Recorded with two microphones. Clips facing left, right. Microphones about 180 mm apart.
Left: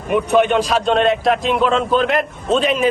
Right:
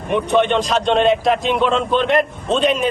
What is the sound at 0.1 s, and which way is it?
Speech, 5° left (ahead or behind).